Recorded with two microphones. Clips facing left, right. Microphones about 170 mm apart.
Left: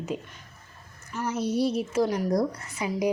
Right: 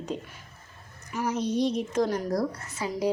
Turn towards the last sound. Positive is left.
turn(degrees=20)  # may be behind; listen again after turning